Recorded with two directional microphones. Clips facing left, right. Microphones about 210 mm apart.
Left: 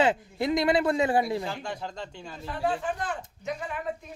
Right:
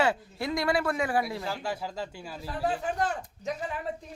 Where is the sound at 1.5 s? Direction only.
5° right (ahead or behind).